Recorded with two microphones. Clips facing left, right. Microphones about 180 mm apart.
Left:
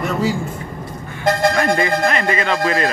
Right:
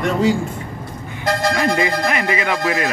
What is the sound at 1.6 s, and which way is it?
Speech, 15° right (ahead or behind).